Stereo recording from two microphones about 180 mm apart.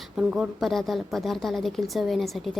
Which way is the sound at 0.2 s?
5° right (ahead or behind).